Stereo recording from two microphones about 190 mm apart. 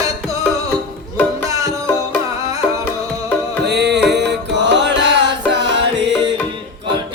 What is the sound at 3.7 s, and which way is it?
Music, 60° right (ahead or behind).